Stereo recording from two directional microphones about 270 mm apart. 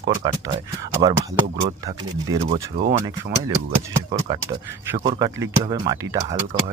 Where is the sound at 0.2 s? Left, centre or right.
Centre.